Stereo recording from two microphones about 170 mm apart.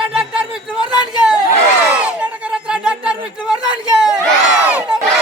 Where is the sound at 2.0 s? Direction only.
5° right (ahead or behind).